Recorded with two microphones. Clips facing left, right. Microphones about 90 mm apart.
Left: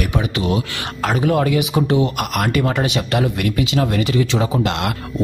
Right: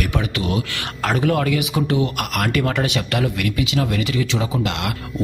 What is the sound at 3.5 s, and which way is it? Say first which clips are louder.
Speech: left 3 dB; 40° left (ahead or behind).